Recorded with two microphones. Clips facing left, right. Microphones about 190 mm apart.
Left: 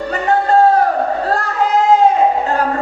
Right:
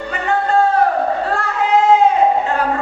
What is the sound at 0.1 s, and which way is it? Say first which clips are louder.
Music: left 3 dB; 40° left (ahead or behind).